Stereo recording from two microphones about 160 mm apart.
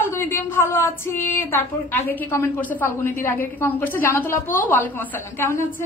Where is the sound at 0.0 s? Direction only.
15° left (ahead or behind).